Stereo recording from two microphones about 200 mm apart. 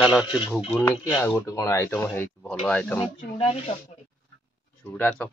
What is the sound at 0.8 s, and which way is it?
Speech, 15° left (ahead or behind).